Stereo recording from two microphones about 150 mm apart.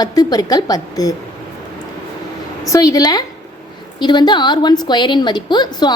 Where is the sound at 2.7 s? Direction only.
25° left (ahead or behind).